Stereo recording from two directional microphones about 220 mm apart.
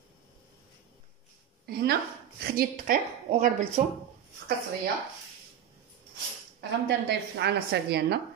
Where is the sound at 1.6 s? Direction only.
50° right (ahead or behind).